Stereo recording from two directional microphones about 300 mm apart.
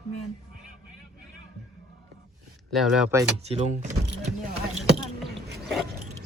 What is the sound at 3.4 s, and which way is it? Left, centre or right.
Speech, right.